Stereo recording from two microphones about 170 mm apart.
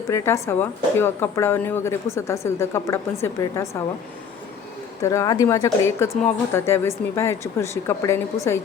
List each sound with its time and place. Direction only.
0.1 s speech: 15° left (ahead or behind)
5.0 s speech: 20° left (ahead or behind)